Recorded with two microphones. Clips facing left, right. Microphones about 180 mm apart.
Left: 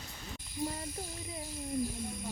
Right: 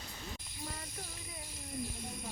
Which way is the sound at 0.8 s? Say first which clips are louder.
Left 6 dB; 30° left (ahead or behind).